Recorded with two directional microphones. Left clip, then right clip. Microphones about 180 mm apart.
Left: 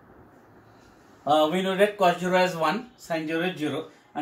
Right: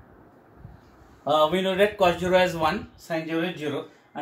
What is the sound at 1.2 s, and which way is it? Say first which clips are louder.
A man's voice: right 1 dB; 15° right (ahead or behind).